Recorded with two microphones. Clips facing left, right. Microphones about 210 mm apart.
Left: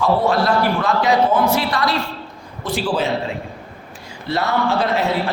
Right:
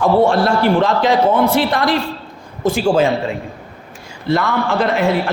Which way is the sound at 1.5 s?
50° right (ahead or behind).